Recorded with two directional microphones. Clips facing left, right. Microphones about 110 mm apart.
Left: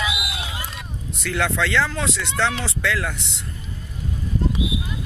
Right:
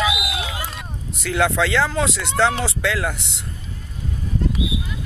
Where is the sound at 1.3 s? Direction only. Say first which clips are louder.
Right 3 dB; 15° right (ahead or behind).